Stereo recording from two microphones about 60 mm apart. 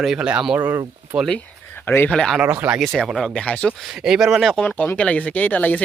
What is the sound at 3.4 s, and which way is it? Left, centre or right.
Speech, left.